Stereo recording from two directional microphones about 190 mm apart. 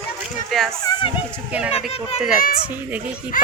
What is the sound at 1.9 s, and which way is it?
Speech, 35° left (ahead or behind).